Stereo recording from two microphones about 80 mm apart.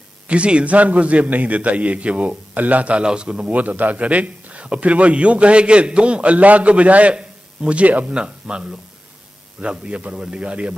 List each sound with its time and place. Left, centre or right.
0.3 s a man's voice: centre